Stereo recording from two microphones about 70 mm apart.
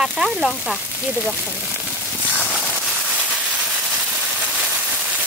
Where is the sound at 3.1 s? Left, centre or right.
Centre.